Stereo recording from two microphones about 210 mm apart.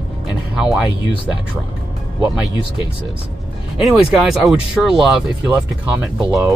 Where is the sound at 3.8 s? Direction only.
Centre (ahead or behind).